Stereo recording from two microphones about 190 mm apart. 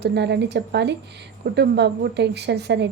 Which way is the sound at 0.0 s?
65° right (ahead or behind).